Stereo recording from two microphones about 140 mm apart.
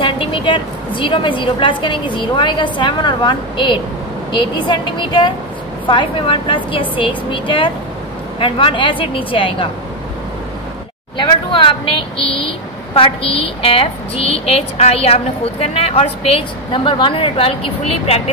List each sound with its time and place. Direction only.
0.0 s a woman's voice: 35° left (ahead or behind)
11.5 s a woman's voice: 40° left (ahead or behind)